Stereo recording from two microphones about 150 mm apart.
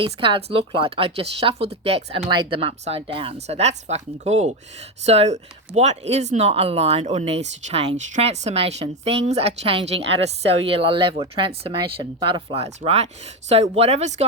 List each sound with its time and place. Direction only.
0.0 s speech: 35° right (ahead or behind)
12.6 s speech: 45° right (ahead or behind)